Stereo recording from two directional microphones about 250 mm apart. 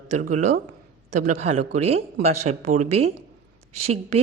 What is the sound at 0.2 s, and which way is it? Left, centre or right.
Speech, right.